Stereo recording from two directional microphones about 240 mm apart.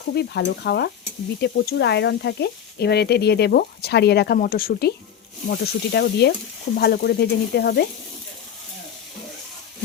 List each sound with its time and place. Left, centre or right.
0.1 s speech: left